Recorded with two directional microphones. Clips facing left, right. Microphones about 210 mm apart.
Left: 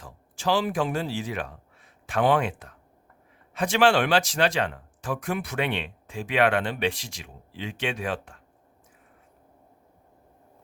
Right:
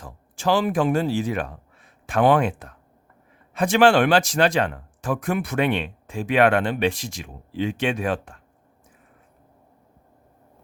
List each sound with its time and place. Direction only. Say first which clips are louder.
0.0 s speech: right 4 dB; 50° right (ahead or behind)